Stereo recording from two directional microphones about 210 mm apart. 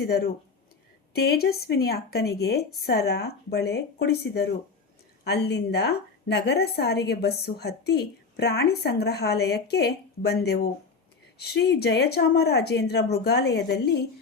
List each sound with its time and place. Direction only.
1.1 s a woman's voice: 50° left (ahead or behind)